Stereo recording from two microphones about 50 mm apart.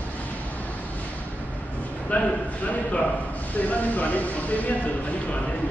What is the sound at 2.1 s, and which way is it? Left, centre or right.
Speech, left.